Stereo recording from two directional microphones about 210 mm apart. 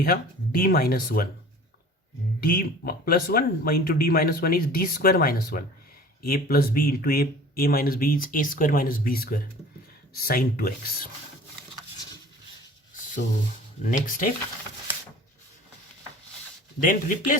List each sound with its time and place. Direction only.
0.0 s speech: 45° left (ahead or behind)
2.4 s speech: 45° left (ahead or behind)
13.9 s speech: 40° left (ahead or behind)
16.8 s speech: 40° left (ahead or behind)